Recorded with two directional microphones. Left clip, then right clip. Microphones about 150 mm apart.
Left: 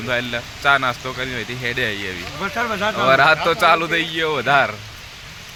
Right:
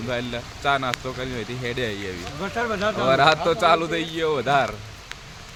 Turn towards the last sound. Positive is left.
turn(degrees=5)  # may be behind; listen again after turning